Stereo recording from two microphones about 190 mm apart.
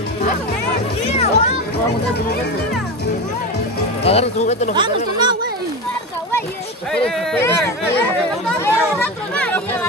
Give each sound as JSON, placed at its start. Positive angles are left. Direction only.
{"t": 1.0, "sound": "music", "side_deg": 35}
{"t": 4.0, "sound": "speech", "side_deg": 30}
{"t": 4.7, "sound": "speech", "side_deg": -25}
{"t": 6.9, "sound": "speech", "side_deg": 10}
{"t": 8.5, "sound": "chatter", "side_deg": 5}